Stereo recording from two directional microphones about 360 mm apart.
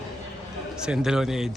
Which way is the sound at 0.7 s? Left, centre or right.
Centre.